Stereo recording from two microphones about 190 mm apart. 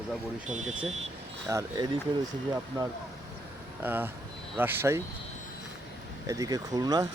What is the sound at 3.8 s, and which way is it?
Speech, 10° right (ahead or behind).